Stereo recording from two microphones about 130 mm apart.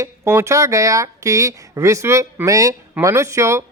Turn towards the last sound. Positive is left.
turn(degrees=-20)  # may be behind; listen again after turning